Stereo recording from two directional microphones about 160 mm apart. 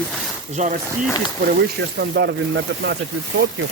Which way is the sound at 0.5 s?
45° right (ahead or behind).